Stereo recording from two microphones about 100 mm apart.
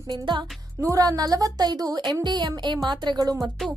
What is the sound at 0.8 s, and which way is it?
A woman's voice, 35° right (ahead or behind).